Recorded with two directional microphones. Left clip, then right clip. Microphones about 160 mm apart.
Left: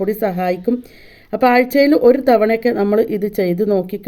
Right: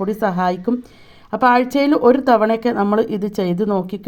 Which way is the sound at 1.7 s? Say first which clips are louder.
Left 3 dB; 60° right (ahead or behind).